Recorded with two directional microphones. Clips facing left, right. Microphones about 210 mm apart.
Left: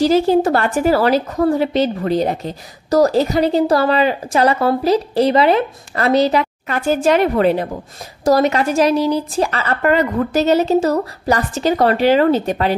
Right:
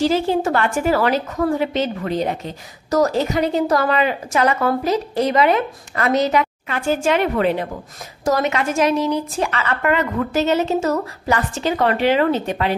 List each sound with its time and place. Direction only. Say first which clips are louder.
0.0 s a woman's voice: left 5 dB; 40° left (ahead or behind)